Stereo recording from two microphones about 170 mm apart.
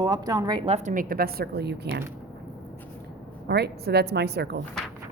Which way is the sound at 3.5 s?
75° right (ahead or behind).